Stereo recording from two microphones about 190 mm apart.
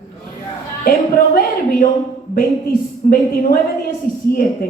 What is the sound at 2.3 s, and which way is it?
Speech, 50° left (ahead or behind).